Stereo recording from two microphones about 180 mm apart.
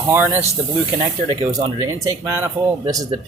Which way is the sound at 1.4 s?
25° right (ahead or behind).